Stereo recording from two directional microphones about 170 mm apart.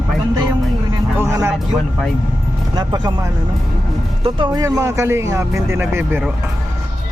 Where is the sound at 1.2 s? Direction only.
15° right (ahead or behind).